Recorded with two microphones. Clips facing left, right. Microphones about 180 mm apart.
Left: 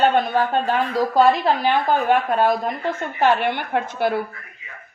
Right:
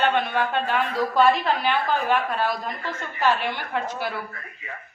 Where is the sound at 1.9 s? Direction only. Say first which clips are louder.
Left 5 dB; 50° left (ahead or behind).